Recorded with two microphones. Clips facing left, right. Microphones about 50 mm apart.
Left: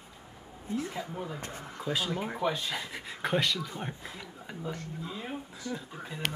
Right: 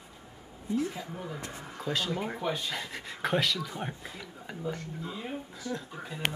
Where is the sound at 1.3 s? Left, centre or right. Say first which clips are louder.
Even; left.